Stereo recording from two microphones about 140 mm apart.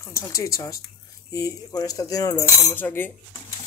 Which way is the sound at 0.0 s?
20° left (ahead or behind).